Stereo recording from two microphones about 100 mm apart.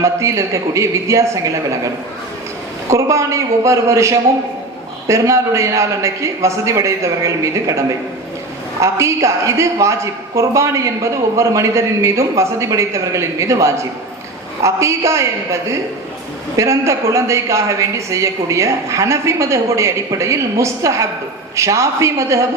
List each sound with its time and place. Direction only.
0.0 s a woman's voice: 30° right (ahead or behind)
2.9 s a woman's voice: 30° right (ahead or behind)
16.6 s a woman's voice: 30° right (ahead or behind)